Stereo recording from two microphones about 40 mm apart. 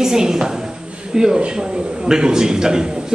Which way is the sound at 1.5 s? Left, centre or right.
Right.